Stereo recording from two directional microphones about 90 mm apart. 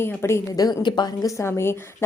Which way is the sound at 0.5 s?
45° left (ahead or behind).